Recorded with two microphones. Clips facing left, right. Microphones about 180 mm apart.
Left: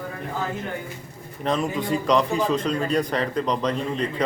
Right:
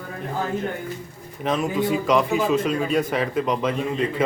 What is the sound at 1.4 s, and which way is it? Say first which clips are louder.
A man's voice: right 2 dB; 5° right (ahead or behind).